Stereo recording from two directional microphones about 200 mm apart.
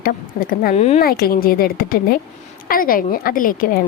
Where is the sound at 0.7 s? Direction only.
30° left (ahead or behind).